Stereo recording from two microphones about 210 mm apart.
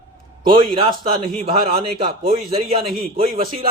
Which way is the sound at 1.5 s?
30° right (ahead or behind).